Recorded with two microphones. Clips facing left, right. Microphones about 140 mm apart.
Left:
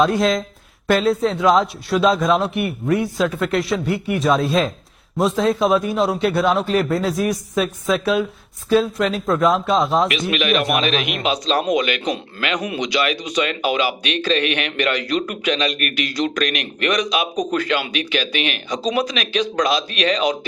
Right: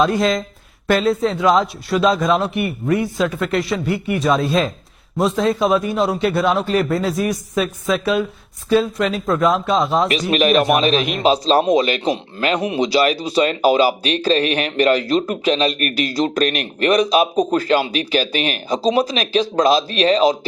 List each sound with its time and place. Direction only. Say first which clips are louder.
0.0 s speech: even; centre (ahead or behind)
10.1 s speech: right 4 dB; 35° right (ahead or behind)